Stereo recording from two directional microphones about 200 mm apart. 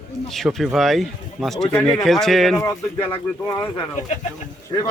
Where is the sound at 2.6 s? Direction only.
10° left (ahead or behind).